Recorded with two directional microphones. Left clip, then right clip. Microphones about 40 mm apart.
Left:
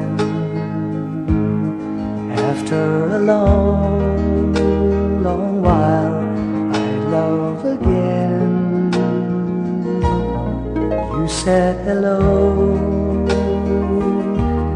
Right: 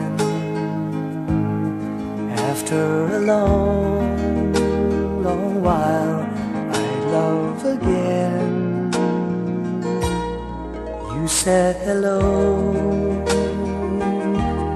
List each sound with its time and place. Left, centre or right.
2.4 s music: left
4.7 s music: left
5.6 s music: left
7.6 s music: centre
11.4 s music: left